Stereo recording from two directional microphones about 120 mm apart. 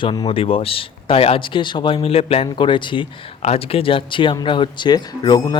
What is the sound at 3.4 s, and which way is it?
Speech, 60° left (ahead or behind).